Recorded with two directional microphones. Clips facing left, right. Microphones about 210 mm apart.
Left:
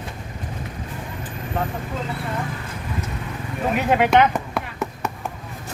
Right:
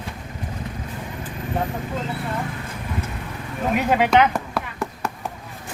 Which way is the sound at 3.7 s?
5° left (ahead or behind).